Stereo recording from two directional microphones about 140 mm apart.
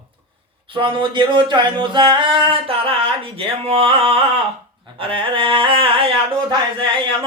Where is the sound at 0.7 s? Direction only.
35° right (ahead or behind).